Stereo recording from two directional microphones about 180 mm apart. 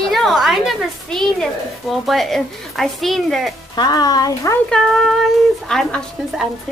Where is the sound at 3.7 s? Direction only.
20° left (ahead or behind).